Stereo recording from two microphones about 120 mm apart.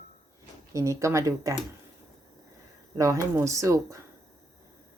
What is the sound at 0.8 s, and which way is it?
Speech, 25° right (ahead or behind).